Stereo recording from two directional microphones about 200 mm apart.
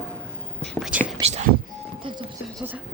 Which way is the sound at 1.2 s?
35° right (ahead or behind).